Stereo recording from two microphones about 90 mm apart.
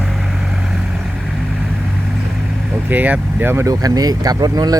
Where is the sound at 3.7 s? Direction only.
40° right (ahead or behind).